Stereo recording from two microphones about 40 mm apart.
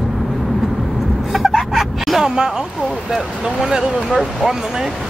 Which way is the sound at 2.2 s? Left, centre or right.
Centre.